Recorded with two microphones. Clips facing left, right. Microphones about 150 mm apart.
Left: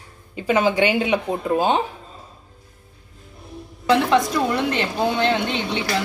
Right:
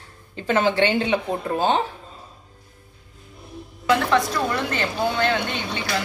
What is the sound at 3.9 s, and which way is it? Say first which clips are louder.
A woman's voice: left 2 dB; 20° left (ahead or behind).